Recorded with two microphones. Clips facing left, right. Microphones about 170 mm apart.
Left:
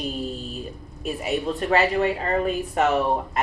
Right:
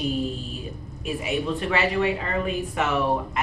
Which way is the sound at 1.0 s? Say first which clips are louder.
Left 1 dB; 40° left (ahead or behind).